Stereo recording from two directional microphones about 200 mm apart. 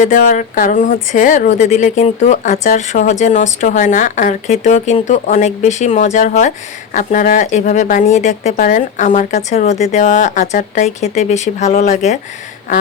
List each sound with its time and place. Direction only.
0.0 s speech: 40° left (ahead or behind)